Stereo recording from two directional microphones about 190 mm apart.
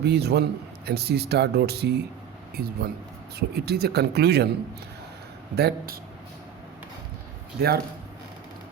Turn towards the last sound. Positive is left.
turn(degrees=-55)  # may be behind; listen again after turning